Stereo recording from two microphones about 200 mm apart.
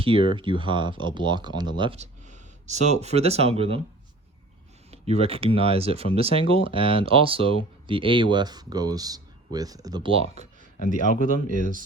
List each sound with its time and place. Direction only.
0.0 s speech: 25° right (ahead or behind)
4.9 s speech: 30° right (ahead or behind)
10.8 s speech: 40° left (ahead or behind)